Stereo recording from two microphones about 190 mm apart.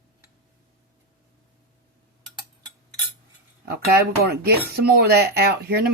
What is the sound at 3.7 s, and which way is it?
Speech, 55° right (ahead or behind).